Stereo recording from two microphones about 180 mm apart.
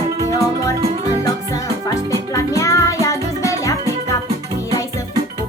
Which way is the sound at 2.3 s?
15° left (ahead or behind).